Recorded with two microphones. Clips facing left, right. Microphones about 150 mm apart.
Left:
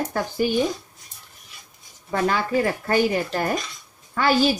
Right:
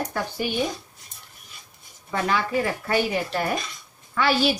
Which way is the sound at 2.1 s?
40° left (ahead or behind).